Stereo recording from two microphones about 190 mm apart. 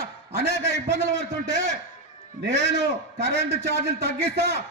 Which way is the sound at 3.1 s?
65° right (ahead or behind).